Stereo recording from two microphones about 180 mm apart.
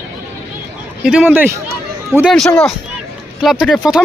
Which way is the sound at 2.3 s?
5° left (ahead or behind).